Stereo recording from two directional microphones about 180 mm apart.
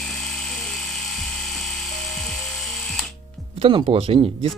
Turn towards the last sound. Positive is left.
turn(degrees=-30)  # may be behind; listen again after turning